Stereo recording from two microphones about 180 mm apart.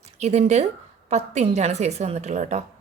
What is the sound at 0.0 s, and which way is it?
A woman's voice, 40° right (ahead or behind).